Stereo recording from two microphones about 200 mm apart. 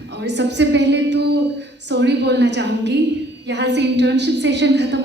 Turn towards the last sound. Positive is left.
turn(degrees=-60)  # may be behind; listen again after turning